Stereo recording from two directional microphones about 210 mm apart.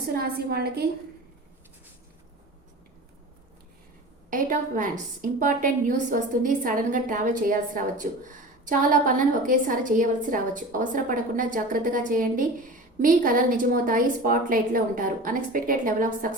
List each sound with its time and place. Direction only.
0.2 s a woman's voice: 45° right (ahead or behind)
4.3 s a woman's voice: 40° right (ahead or behind)